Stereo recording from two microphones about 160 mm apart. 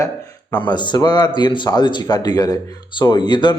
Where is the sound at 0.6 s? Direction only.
30° left (ahead or behind).